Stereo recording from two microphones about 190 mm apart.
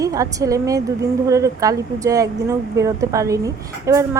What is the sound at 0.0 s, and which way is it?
Speech, 20° right (ahead or behind).